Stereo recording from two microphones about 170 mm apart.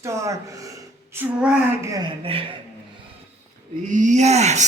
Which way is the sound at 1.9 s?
30° right (ahead or behind).